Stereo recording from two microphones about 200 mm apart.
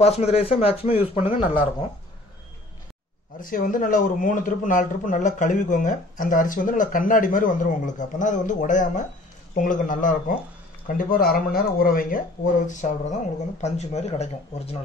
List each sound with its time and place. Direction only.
0.0 s speech: 30° left (ahead or behind)
1.4 s speech: 10° right (ahead or behind)
3.3 s speech: 45° left (ahead or behind)